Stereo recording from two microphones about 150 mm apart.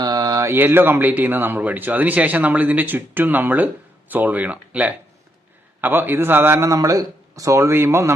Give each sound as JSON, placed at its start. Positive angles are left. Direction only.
{"t": 0.0, "sound": "speech", "side_deg": -25}